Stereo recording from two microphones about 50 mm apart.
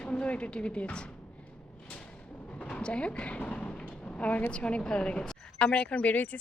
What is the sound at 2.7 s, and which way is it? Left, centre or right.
Speech, left.